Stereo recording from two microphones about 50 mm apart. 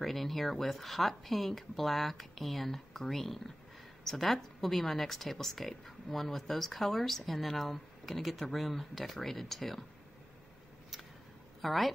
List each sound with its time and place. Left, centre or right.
0.0 s speech: centre
11.6 s a woman's voice: centre